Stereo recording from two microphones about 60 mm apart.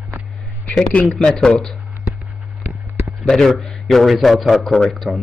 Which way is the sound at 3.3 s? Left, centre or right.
Centre.